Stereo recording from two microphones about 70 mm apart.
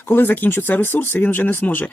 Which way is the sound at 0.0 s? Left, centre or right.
Left.